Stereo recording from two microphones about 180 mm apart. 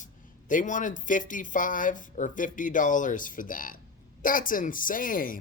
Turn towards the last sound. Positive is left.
turn(degrees=50)  # may be behind; listen again after turning